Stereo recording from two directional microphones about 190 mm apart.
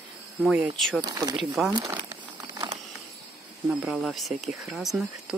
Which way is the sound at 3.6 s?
Centre (ahead or behind).